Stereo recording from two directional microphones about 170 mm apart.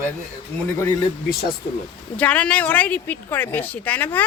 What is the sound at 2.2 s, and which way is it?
A woman's voice, 10° left (ahead or behind).